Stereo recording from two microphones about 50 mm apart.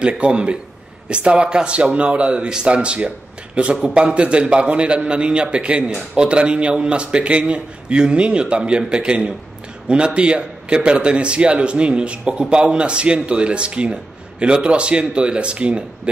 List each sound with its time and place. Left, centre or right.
0.0 s a man's voice: right